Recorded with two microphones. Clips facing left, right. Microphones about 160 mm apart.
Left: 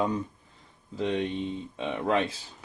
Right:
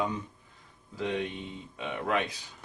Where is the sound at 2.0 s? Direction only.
30° left (ahead or behind).